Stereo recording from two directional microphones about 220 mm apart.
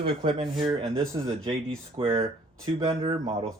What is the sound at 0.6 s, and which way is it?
Speech, 25° right (ahead or behind).